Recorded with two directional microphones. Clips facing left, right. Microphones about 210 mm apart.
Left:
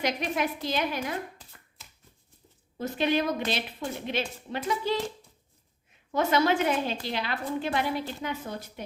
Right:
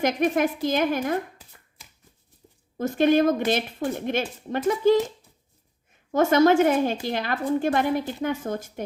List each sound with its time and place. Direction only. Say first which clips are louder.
0.0 s a woman's voice: right 7 dB; 50° right (ahead or behind)
2.7 s a woman's voice: right 7 dB; 50° right (ahead or behind)
6.1 s a woman's voice: right 7 dB; 45° right (ahead or behind)